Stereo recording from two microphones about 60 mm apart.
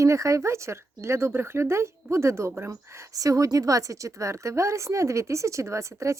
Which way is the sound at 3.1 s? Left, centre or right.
Right.